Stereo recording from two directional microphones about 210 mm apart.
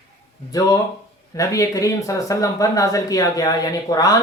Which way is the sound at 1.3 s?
15° left (ahead or behind).